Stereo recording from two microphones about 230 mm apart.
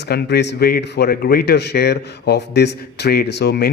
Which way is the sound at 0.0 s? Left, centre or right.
Left.